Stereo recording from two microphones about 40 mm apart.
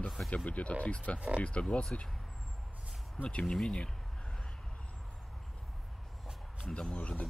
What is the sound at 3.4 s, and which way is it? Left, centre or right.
Speech, centre.